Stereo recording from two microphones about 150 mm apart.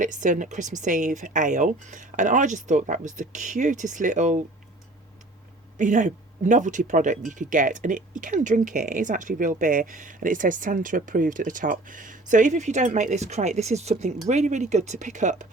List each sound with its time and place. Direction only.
0.0 s speech: 60° right (ahead or behind)
5.7 s speech: 55° right (ahead or behind)